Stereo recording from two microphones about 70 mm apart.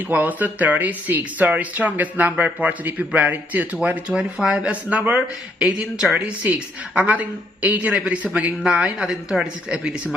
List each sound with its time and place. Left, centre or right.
0.1 s speech: right
4.1 s speech: centre